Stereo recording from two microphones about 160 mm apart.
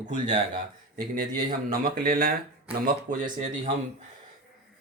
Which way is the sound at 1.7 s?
65° right (ahead or behind).